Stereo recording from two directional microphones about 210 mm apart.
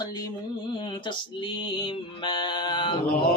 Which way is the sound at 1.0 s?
25° left (ahead or behind).